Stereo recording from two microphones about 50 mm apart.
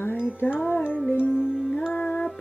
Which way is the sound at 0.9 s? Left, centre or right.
Left.